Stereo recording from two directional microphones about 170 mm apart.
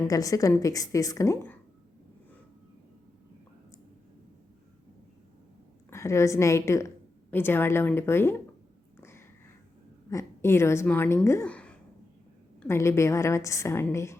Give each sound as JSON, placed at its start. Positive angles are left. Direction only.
{"t": 0.1, "sound": "a woman's voice", "side_deg": 20}
{"t": 5.9, "sound": "a woman's voice", "side_deg": 15}
{"t": 9.0, "sound": "a sound", "side_deg": 15}
{"t": 10.1, "sound": "a woman's voice", "side_deg": 15}